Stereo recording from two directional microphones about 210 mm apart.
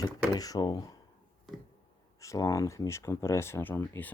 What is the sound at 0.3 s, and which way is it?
Speech, 15° left (ahead or behind).